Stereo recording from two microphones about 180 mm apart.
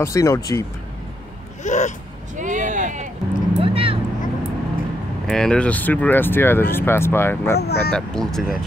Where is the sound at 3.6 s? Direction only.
30° right (ahead or behind).